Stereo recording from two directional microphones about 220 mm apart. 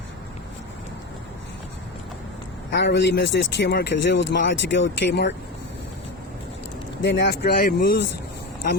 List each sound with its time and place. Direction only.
2.6 s speech: 50° left (ahead or behind)
7.0 s speech: 55° left (ahead or behind)